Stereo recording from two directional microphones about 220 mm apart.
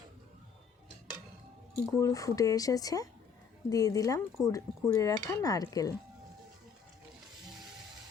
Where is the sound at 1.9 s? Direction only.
15° left (ahead or behind).